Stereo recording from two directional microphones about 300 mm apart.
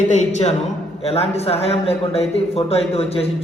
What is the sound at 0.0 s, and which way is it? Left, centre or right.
A man's voice, left.